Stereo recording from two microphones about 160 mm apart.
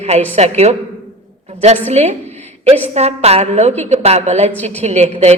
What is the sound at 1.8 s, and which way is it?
A woman's voice, 40° right (ahead or behind).